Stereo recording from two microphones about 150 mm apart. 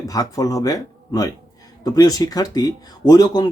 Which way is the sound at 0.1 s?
25° left (ahead or behind).